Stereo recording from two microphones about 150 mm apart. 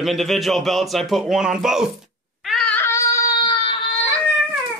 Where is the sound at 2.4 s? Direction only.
Centre (ahead or behind).